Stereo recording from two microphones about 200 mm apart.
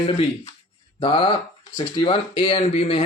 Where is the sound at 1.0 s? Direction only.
25° left (ahead or behind).